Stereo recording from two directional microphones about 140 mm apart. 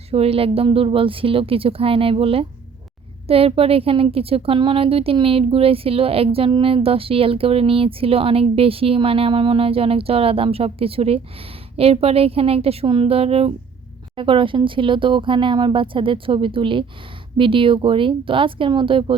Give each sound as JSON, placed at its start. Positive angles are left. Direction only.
{"t": 0.1, "sound": "speech", "side_deg": -45}